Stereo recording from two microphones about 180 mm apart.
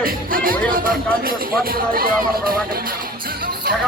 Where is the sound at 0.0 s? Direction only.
55° right (ahead or behind).